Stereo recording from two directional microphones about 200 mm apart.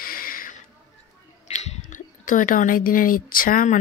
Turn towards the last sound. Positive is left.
turn(degrees=40)  # may be behind; listen again after turning